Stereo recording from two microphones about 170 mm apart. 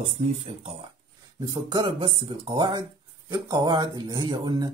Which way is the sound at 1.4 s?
25° right (ahead or behind).